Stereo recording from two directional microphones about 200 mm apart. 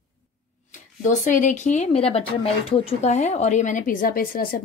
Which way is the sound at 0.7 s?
40° left (ahead or behind).